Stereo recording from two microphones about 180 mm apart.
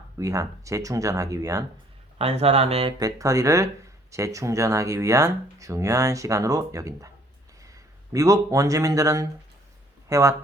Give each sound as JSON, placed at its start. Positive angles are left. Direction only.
{"t": 0.2, "sound": "speech", "side_deg": -20}
{"t": 2.1, "sound": "speech", "side_deg": -35}
{"t": 3.0, "sound": "a man's voice", "side_deg": -20}